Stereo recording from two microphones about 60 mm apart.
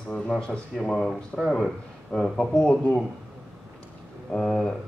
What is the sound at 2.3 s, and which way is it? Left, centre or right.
Speech, centre.